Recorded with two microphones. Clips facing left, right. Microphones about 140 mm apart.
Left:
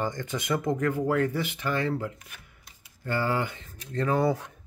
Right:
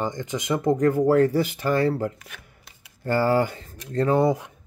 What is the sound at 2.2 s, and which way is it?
Shuffling cards, 75° right (ahead or behind).